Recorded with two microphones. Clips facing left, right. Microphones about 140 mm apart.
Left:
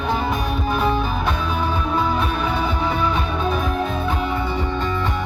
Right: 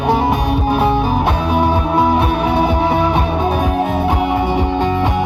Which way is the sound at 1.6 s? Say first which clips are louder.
Right 9 dB; 70° right (ahead or behind).